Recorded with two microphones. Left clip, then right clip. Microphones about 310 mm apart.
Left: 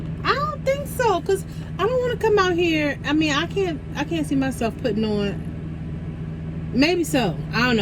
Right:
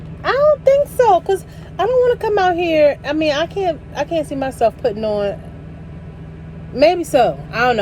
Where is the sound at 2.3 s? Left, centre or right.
Centre.